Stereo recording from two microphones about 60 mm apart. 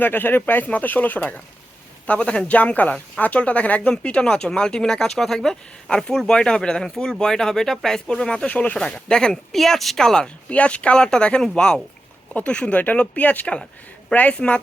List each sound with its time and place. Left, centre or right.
0.0 s speech: left
2.0 s speech: centre
8.4 s speech: left